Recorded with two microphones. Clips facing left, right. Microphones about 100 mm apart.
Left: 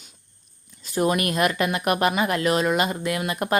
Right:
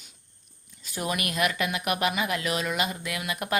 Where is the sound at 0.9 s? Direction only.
40° left (ahead or behind).